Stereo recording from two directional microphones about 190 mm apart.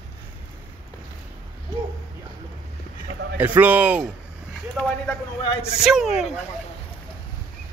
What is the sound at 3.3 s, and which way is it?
Speech, 10° right (ahead or behind).